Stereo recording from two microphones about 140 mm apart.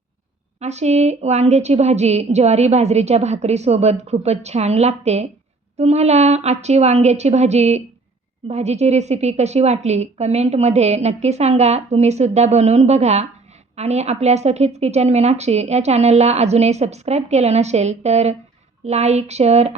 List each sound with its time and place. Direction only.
0.6 s a woman's voice: 50° right (ahead or behind)